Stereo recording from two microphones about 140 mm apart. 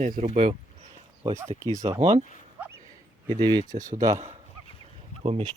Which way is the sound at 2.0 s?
55° right (ahead or behind).